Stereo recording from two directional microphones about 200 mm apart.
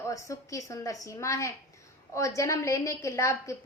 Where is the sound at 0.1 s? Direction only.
15° left (ahead or behind).